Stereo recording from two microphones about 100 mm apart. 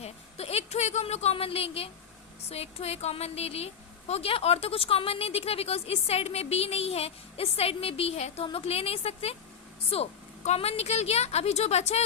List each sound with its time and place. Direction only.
0.0 s a sound: 90° left
2.5 s a woman's voice: 90° left
4.1 s a woman's voice: 75° left (ahead or behind); by 12.0 s 90° left